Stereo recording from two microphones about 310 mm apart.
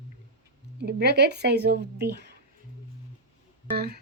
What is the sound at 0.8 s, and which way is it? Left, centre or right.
A woman's voice, right.